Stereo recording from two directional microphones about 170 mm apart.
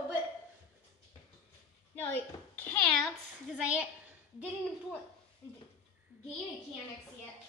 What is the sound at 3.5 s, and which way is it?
Speech, 5° right (ahead or behind).